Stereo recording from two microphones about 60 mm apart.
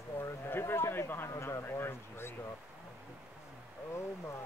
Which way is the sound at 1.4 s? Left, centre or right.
Left.